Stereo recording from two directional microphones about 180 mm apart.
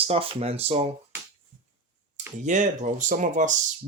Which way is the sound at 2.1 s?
40° right (ahead or behind).